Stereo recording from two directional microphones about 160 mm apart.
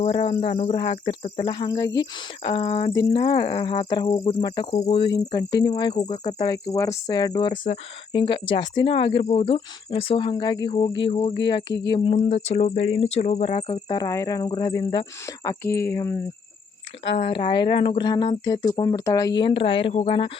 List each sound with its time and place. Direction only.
0.0 s speech: 35° left (ahead or behind)
13.8 s speech: 25° left (ahead or behind)
14.8 s cricket: 25° left (ahead or behind)
17.1 s speech: 35° left (ahead or behind)